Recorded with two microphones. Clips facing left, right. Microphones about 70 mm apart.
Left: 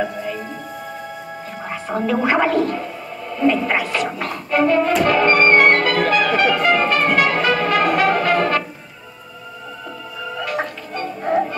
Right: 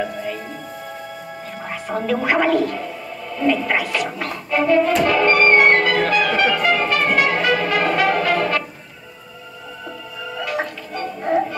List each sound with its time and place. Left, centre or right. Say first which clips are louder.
0.0 s music: left 1 dB; centre
2.0 s speech: left 1 dB; centre
4.2 s music: left 5 dB; centre
5.6 s music: even; centre
10.4 s music: even; centre